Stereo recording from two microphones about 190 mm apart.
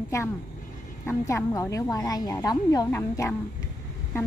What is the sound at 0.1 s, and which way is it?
A woman's voice, 15° left (ahead or behind).